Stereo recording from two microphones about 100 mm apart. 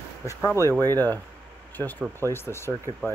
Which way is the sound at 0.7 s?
35° right (ahead or behind).